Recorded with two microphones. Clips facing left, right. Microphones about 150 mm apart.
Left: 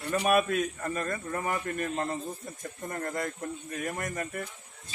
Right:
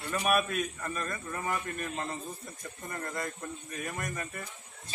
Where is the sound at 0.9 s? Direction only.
45° left (ahead or behind).